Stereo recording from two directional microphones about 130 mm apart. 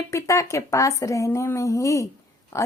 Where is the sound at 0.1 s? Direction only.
25° left (ahead or behind).